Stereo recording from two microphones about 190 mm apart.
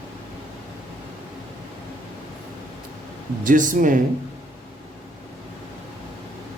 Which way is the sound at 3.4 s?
45° right (ahead or behind).